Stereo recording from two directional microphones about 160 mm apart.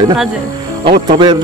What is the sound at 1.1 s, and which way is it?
Speech, 30° right (ahead or behind).